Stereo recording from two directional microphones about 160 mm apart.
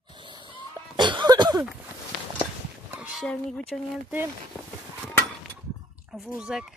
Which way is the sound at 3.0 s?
Centre (ahead or behind).